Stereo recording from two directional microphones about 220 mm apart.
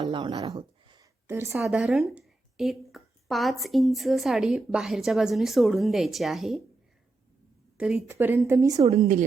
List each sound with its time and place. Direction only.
0.0 s a sound: 20° right (ahead or behind)
1.5 s speech: centre (ahead or behind)
7.8 s speech: 5° right (ahead or behind)